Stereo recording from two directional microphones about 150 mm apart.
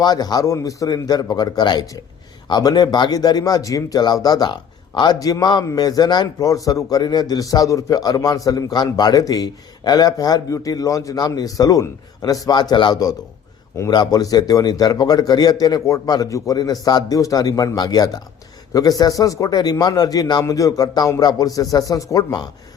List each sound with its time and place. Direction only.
0.0 s speech: 25° left (ahead or behind)